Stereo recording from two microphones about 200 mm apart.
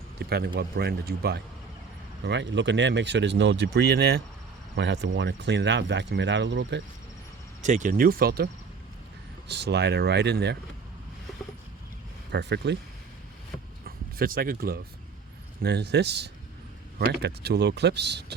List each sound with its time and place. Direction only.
0.2 s speech: 55° right (ahead or behind)
7.6 s speech: 40° right (ahead or behind)
9.5 s speech: 55° right (ahead or behind)
12.3 s speech: 60° right (ahead or behind)
13.8 s a sound: 45° right (ahead or behind)
15.6 s speech: 55° right (ahead or behind)